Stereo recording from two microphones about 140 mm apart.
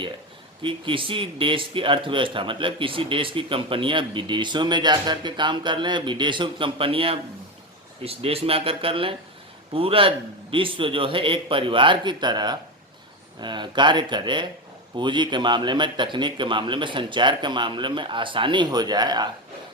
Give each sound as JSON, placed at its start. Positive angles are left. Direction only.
{"t": 0.6, "sound": "speech", "side_deg": -40}